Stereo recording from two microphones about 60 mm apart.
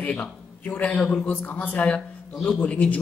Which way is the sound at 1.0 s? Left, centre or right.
Centre.